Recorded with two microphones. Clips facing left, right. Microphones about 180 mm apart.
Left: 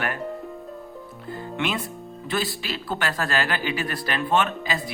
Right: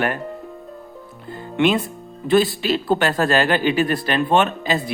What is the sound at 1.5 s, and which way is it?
Speech, 20° right (ahead or behind).